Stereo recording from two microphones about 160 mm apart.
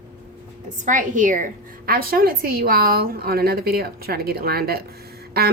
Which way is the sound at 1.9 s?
65° right (ahead or behind).